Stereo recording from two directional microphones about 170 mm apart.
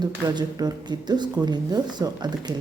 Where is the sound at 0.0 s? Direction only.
25° right (ahead or behind).